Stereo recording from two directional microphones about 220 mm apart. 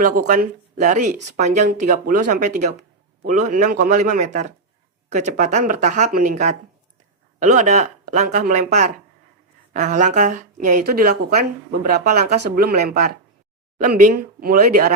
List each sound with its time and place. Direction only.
0.2 s a woman's voice: 35° right (ahead or behind)